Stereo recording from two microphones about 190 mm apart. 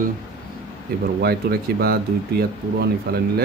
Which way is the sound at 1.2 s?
55° right (ahead or behind).